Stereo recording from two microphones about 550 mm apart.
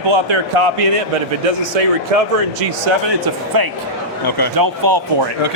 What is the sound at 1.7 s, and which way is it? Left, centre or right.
Speech, right.